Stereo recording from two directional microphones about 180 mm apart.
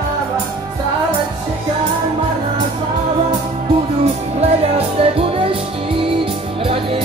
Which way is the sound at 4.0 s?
35° right (ahead or behind).